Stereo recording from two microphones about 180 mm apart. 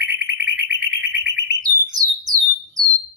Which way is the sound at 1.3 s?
20° right (ahead or behind).